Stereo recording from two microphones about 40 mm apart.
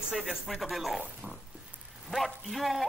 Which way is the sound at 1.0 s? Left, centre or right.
Right.